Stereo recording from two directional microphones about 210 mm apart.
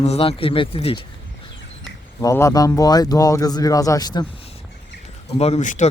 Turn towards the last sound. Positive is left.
turn(degrees=35)  # may be behind; listen again after turning